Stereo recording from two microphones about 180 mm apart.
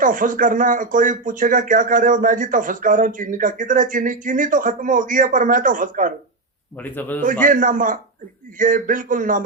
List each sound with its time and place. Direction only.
0.0 s speech: 45° right (ahead or behind)
6.8 s a man's voice: 10° left (ahead or behind)
7.4 s speech: 50° right (ahead or behind)